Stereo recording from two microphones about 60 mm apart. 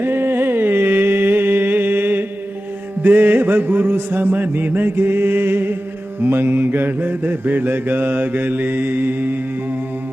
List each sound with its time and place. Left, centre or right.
0.0 s music: right
3.0 s mantra: right